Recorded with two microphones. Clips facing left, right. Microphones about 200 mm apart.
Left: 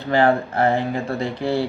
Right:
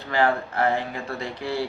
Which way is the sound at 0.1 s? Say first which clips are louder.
Left 5 dB; 30° left (ahead or behind).